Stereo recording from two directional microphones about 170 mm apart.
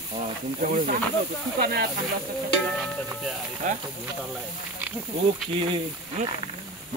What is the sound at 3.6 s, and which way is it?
Speech, 45° right (ahead or behind).